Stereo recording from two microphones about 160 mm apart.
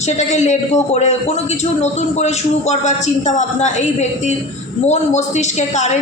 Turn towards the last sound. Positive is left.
turn(degrees=45)  # may be behind; listen again after turning